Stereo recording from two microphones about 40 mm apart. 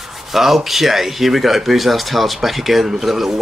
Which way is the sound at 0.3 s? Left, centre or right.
Centre.